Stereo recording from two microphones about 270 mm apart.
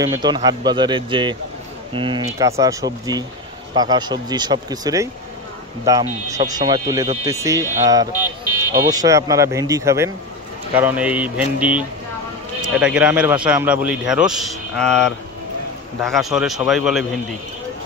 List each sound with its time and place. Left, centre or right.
0.0 s a man's voice: centre